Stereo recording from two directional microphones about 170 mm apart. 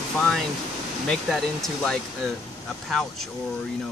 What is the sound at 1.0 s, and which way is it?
Speech, 5° left (ahead or behind).